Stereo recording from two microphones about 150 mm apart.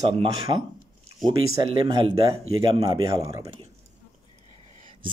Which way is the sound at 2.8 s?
25° right (ahead or behind).